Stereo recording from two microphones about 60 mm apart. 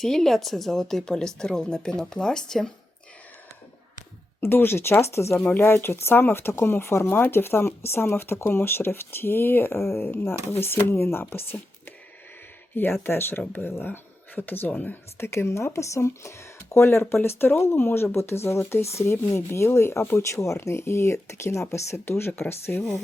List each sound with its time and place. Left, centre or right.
0.0 s speech: centre
4.4 s speech: left
5.4 s speech: left
5.6 s speech: left
12.7 s speech: left
15.2 s speech: left